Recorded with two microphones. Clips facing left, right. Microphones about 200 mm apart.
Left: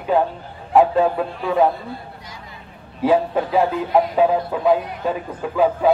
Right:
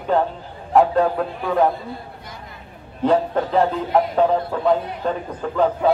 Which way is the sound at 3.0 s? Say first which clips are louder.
Left 1 dB; 5° left (ahead or behind).